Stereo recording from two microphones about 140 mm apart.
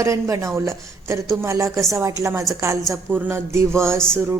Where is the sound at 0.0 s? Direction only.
20° right (ahead or behind).